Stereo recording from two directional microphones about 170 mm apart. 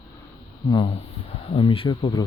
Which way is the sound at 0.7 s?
25° left (ahead or behind).